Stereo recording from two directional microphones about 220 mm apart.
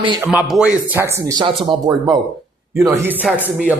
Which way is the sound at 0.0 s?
20° right (ahead or behind).